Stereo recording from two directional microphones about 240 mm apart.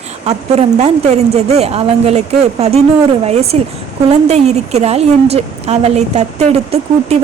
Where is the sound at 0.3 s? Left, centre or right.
Right.